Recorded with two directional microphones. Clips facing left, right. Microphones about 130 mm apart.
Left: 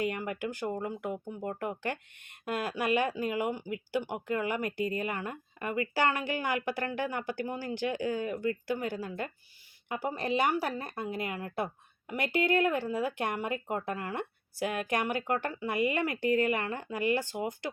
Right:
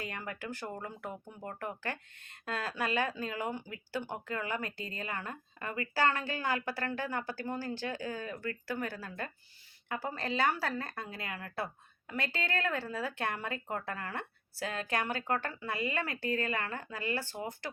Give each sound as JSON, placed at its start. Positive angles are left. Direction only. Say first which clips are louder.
{"t": 0.0, "sound": "speech", "louder": "left 8 dB", "side_deg": 15}